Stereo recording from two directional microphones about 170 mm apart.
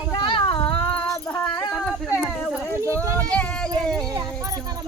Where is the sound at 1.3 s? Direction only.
5° left (ahead or behind).